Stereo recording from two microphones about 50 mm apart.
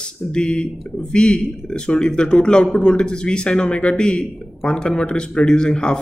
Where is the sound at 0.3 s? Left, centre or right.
Centre.